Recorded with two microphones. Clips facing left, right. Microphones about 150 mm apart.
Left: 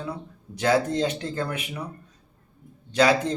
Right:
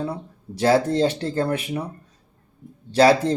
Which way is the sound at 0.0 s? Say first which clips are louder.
Right 5 dB; 35° right (ahead or behind).